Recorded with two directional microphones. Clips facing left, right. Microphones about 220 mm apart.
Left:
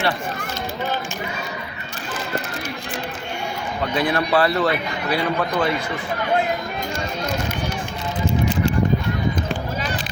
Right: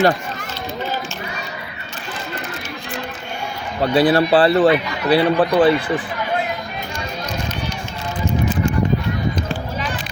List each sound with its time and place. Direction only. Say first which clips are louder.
3.8 s a man's voice: right 7 dB; 35° right (ahead or behind)